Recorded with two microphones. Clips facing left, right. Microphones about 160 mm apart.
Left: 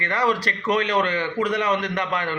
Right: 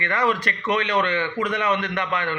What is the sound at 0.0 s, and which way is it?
A man's voice, 35° left (ahead or behind).